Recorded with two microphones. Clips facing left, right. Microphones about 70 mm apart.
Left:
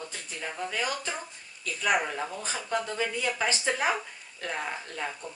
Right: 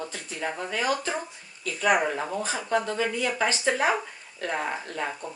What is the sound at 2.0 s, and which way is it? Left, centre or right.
Speech, centre.